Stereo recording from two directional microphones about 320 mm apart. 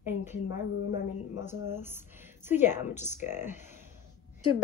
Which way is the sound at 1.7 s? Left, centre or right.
Centre.